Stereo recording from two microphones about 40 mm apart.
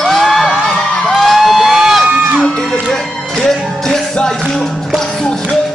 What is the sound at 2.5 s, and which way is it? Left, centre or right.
Music, centre.